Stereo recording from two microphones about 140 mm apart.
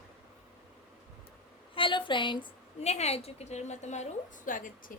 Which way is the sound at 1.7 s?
35° left (ahead or behind).